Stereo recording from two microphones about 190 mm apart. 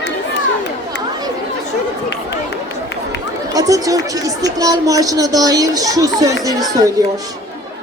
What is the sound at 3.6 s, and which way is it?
A woman's voice, 20° right (ahead or behind).